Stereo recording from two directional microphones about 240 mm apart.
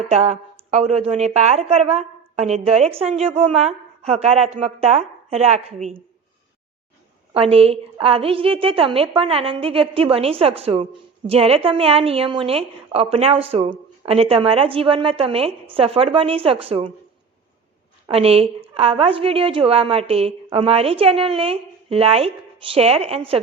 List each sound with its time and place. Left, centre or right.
0.1 s a woman's voice: right
7.3 s a woman's voice: right
18.0 s a woman's voice: right